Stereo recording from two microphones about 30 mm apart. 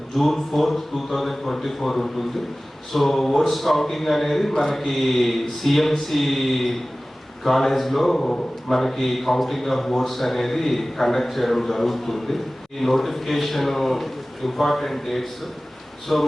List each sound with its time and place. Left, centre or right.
0.2 s a man's voice: centre